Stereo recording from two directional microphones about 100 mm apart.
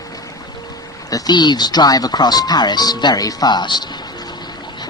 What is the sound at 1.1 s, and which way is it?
Speech, 45° left (ahead or behind).